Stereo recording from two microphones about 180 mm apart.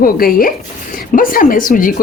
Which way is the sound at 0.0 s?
55° left (ahead or behind).